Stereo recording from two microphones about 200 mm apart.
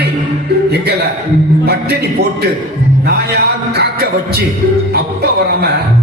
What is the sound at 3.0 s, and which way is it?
A man's voice, 55° right (ahead or behind).